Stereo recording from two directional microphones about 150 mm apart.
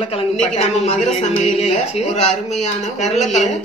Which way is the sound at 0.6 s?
50° left (ahead or behind).